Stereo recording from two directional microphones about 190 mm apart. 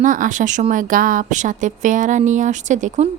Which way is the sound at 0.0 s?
45° right (ahead or behind).